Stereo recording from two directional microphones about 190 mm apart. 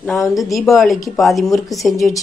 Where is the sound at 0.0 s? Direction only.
Centre (ahead or behind).